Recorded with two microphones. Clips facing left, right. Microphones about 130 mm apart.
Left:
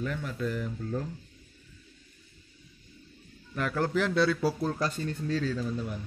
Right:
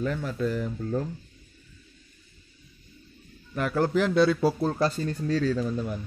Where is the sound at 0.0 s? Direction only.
35° right (ahead or behind).